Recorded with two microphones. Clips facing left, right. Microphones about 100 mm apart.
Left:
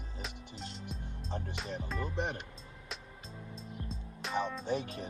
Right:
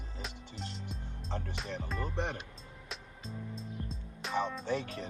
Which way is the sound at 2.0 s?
15° left (ahead or behind).